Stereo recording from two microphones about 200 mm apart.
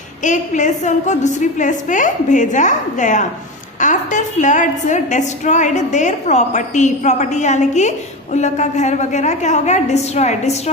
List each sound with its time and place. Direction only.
0.2 s a woman's voice: 40° left (ahead or behind)